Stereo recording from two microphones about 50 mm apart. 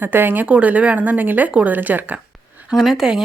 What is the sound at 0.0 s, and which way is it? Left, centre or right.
Speech, right.